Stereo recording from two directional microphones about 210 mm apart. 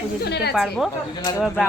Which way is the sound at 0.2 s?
50° left (ahead or behind).